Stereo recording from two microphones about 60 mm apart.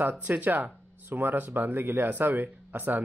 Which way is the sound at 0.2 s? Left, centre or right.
Right.